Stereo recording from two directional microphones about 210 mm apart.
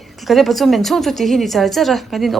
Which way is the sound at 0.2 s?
Centre (ahead or behind).